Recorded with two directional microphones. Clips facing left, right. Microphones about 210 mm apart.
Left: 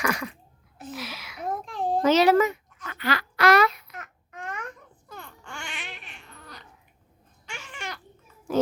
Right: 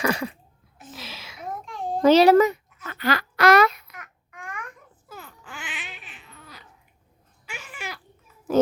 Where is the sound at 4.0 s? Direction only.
25° left (ahead or behind).